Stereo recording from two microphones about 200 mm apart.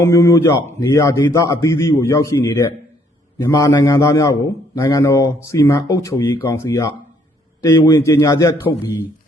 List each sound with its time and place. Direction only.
0.0 s a man's voice: 15° left (ahead or behind)